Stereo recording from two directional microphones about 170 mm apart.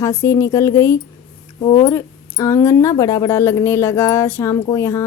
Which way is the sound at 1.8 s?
20° left (ahead or behind).